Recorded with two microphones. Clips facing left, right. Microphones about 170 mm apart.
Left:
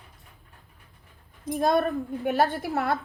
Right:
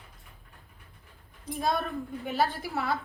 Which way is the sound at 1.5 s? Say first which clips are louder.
Left 7 dB; 55° left (ahead or behind).